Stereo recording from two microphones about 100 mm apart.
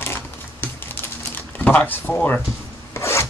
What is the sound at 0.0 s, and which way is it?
Typing, 20° left (ahead or behind).